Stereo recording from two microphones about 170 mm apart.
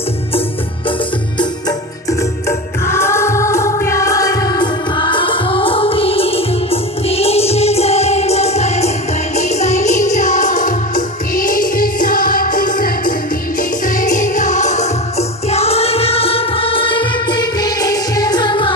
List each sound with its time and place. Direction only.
1.4 s music: 20° left (ahead or behind)